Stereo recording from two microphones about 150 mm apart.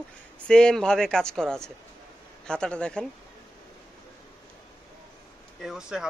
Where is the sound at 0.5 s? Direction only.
5° left (ahead or behind).